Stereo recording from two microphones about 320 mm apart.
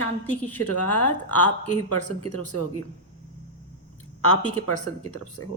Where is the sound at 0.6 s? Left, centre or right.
Left.